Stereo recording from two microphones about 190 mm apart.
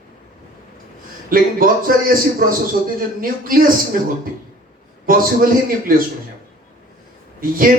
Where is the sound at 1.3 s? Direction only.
50° right (ahead or behind).